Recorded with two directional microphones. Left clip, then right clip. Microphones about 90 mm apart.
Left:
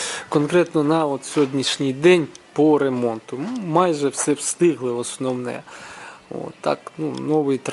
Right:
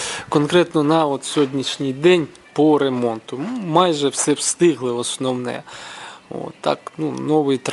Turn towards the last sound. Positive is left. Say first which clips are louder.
# right 2 dB
turn(degrees=-10)  # may be behind; listen again after turning